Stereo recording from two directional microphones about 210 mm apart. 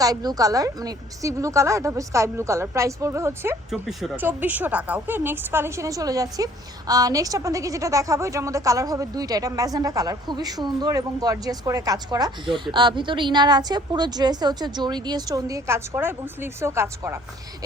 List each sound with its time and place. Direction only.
0.0 s speech: 20° right (ahead or behind)
3.7 s speech: centre (ahead or behind)